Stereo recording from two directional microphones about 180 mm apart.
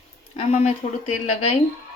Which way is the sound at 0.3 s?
40° left (ahead or behind).